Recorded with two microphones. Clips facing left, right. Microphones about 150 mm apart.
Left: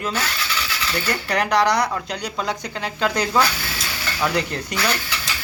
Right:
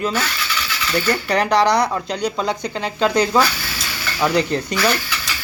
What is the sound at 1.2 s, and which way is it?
Speech, 30° right (ahead or behind).